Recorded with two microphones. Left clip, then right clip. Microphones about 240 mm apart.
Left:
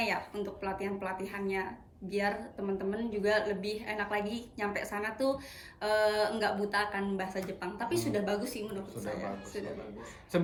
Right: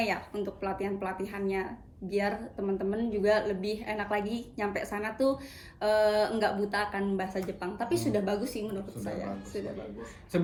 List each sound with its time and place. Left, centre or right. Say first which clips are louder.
0.0 s speech: right 2 dB; centre
10.3 s speech: even; centre